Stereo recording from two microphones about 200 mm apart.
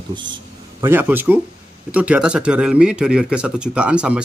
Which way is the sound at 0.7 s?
10° right (ahead or behind).